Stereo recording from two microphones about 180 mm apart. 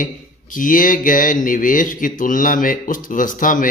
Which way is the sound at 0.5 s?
50° left (ahead or behind).